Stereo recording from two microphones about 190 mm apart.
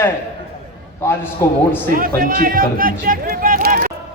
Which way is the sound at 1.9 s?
50° right (ahead or behind).